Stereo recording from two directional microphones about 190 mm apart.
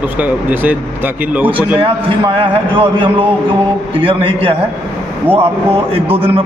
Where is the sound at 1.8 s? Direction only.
25° right (ahead or behind).